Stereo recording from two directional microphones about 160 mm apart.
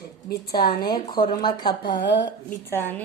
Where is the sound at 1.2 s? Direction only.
30° left (ahead or behind).